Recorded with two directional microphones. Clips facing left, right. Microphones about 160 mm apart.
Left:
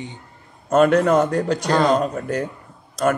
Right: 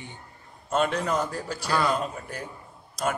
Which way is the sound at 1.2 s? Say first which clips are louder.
Left 11 dB; 70° left (ahead or behind).